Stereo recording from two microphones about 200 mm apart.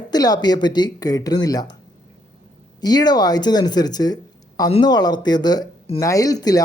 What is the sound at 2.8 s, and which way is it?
Speech, 20° left (ahead or behind).